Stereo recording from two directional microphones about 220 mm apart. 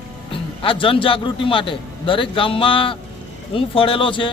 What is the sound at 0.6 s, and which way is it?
A man's voice, 25° left (ahead or behind).